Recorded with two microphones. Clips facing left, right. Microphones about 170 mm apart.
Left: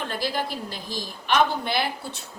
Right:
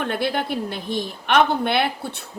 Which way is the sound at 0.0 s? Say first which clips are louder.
Right 5 dB; 60° right (ahead or behind).